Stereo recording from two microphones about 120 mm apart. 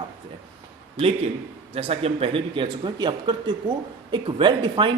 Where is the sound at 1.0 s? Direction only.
45° right (ahead or behind).